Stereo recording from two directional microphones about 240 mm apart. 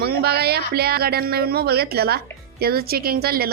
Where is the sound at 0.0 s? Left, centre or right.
Right.